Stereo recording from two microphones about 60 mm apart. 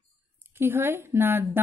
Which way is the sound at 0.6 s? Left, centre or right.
Right.